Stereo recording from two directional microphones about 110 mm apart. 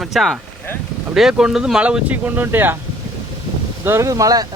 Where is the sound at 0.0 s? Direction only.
Centre (ahead or behind); by 2.7 s 20° right (ahead or behind).